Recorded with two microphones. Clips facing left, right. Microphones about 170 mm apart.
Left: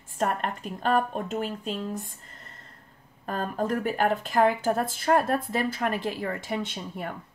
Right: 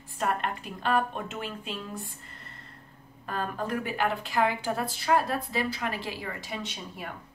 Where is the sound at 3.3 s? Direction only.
45° left (ahead or behind).